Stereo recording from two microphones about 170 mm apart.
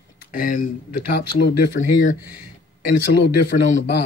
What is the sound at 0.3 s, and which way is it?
Speech, 55° left (ahead or behind).